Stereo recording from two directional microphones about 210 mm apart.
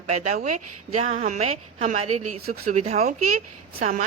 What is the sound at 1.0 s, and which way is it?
A woman's voice, 35° right (ahead or behind).